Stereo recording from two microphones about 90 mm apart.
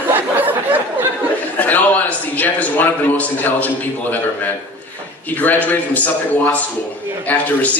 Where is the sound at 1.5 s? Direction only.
20° left (ahead or behind).